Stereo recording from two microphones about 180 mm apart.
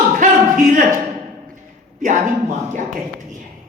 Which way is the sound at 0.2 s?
45° right (ahead or behind).